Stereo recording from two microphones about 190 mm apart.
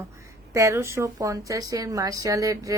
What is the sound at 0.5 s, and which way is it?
A woman's voice, 15° right (ahead or behind).